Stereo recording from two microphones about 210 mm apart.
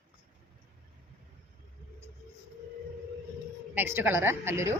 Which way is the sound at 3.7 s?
10° right (ahead or behind).